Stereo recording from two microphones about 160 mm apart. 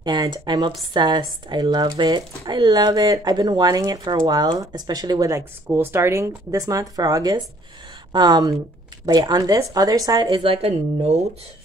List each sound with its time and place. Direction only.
0.0 s speech: 25° right (ahead or behind)